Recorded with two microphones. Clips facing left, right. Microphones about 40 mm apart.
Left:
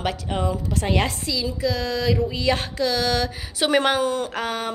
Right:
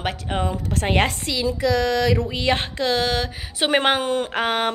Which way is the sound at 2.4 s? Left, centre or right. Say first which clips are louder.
Even; right.